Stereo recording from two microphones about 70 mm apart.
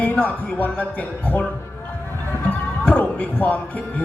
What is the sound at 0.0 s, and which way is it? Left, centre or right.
Speech, left.